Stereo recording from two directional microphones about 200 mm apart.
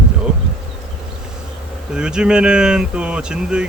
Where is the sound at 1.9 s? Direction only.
5° right (ahead or behind).